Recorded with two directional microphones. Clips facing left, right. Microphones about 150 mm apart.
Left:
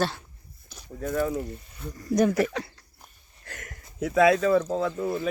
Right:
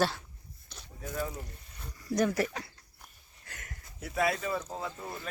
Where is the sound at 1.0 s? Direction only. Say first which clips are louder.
Left 9 dB; 75° left (ahead or behind).